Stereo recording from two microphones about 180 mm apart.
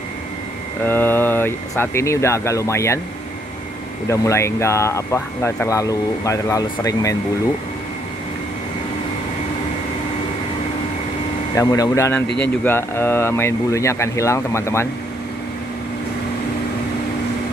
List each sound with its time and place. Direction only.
0.8 s speech: 10° left (ahead or behind)
4.1 s speech: 15° left (ahead or behind)
11.5 s speech: 20° left (ahead or behind)